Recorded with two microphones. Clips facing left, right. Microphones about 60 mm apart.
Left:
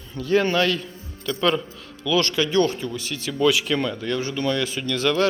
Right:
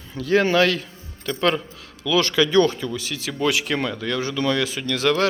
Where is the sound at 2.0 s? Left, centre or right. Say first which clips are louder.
Right 1 dB; right.